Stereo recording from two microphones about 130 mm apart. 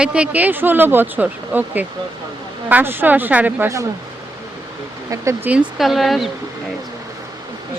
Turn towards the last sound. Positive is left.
turn(degrees=0)  # may be behind; listen again after turning